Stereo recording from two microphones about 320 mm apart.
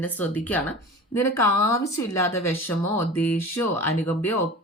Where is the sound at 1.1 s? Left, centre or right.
Left.